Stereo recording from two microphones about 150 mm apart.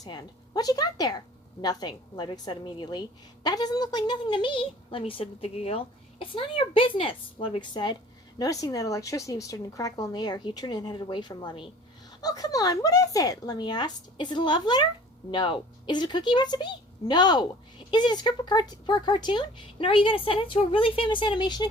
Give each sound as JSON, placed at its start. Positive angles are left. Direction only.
{"t": 0.0, "sound": "a woman's voice", "side_deg": 25}